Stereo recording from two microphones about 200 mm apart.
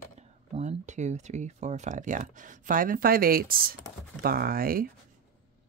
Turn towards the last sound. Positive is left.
turn(degrees=-45)  # may be behind; listen again after turning